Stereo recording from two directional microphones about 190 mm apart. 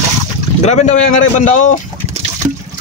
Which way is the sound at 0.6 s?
35° left (ahead or behind).